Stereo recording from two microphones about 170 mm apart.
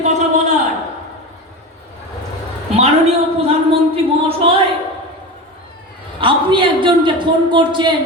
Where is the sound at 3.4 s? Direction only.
35° right (ahead or behind).